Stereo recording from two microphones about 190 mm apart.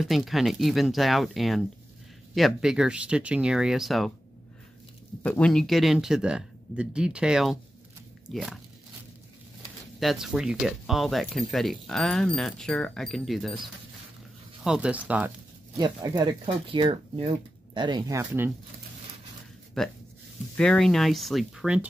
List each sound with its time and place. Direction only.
0.0 s speech: centre (ahead or behind)
5.2 s speech: 5° left (ahead or behind)
9.9 s speech: centre (ahead or behind)
14.6 s speech: 5° right (ahead or behind)
15.8 s speech: 20° right (ahead or behind)
19.8 s speech: centre (ahead or behind)